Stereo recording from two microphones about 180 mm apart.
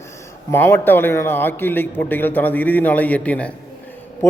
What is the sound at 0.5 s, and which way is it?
A man's voice, 10° left (ahead or behind).